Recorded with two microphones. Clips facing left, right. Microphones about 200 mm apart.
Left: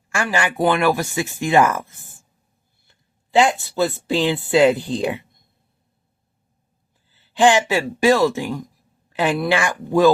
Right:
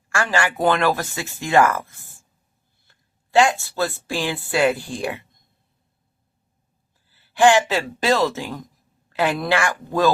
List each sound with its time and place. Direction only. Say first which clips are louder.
0.1 s speech: even; 15° left (ahead or behind)
3.3 s speech: left 1 dB; 20° left (ahead or behind)
7.1 s speech: even; 20° left (ahead or behind)